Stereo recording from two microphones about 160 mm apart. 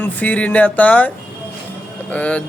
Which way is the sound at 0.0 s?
10° left (ahead or behind).